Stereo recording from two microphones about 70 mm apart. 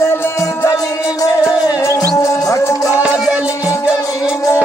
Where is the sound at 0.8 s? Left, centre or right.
Left.